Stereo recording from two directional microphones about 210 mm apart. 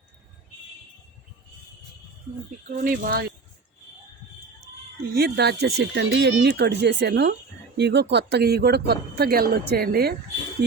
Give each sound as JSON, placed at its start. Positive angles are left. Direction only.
{"t": 2.6, "sound": "speech", "side_deg": -40}
{"t": 5.1, "sound": "speech", "side_deg": -50}